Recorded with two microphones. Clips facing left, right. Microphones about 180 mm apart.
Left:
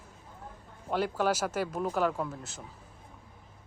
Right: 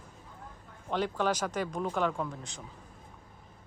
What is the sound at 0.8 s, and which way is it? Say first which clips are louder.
Speech: left 1 dB; 5° left (ahead or behind).